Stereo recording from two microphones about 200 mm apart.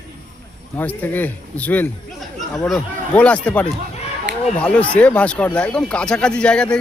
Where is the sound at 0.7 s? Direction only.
10° left (ahead or behind).